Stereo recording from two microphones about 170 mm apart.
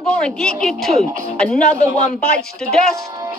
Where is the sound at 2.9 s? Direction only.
20° right (ahead or behind).